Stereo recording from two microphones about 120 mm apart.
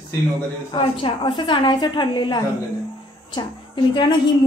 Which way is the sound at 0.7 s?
45° left (ahead or behind).